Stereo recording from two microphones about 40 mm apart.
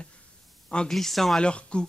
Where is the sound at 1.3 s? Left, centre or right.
Left.